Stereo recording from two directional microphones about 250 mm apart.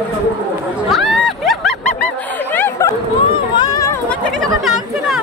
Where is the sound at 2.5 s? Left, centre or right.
Centre.